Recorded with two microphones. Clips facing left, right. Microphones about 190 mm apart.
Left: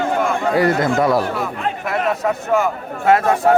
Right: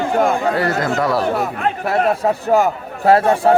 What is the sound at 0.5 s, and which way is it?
Speech, 20° left (ahead or behind).